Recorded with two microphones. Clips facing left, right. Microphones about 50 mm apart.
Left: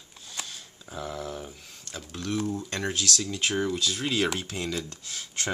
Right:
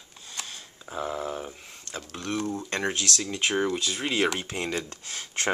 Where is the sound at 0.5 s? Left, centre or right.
Right.